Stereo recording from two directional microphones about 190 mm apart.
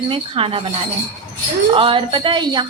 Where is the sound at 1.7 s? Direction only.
25° right (ahead or behind).